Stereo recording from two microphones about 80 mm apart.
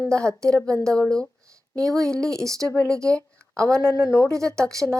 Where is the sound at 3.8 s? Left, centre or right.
Left.